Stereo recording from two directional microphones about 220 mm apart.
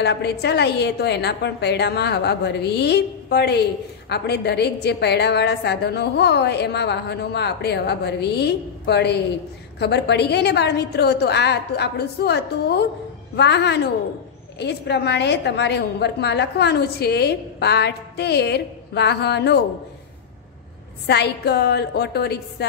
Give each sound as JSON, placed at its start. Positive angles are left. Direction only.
{"t": 0.0, "sound": "a woman's voice", "side_deg": 50}
{"t": 21.1, "sound": "a woman's voice", "side_deg": 50}